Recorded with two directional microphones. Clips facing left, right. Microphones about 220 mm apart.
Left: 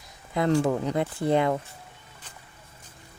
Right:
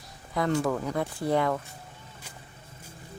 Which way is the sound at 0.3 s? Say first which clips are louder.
Left 3 dB; 25° left (ahead or behind).